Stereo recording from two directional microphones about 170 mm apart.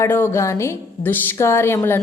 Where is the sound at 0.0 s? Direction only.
15° left (ahead or behind).